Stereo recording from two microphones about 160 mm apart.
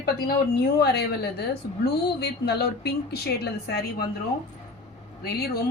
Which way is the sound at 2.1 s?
90° left.